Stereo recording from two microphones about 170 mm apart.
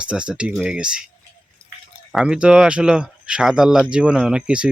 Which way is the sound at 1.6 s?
15° right (ahead or behind).